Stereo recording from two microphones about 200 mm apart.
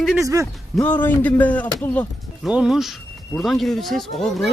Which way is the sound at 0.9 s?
10° left (ahead or behind).